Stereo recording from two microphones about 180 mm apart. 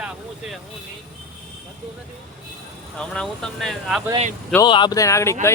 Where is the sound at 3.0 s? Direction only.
5° left (ahead or behind).